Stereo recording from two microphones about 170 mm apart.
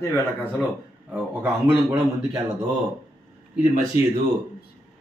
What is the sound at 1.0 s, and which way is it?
Speech, 10° right (ahead or behind).